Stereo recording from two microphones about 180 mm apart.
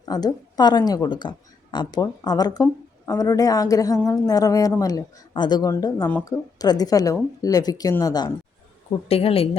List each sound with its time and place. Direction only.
0.0 s a woman's voice: 20° left (ahead or behind)
8.9 s speech: 35° left (ahead or behind)